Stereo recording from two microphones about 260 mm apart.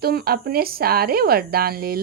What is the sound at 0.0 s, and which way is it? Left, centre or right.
A woman's voice, right.